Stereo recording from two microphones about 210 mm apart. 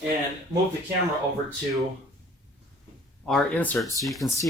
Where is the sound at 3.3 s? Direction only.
5° left (ahead or behind).